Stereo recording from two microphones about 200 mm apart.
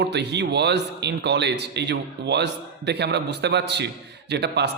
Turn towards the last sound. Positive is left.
turn(degrees=-55)  # may be behind; listen again after turning